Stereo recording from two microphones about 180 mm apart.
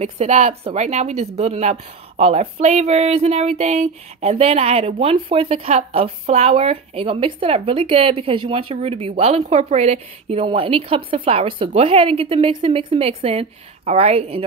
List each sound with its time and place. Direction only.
0.0 s speech: 40° right (ahead or behind)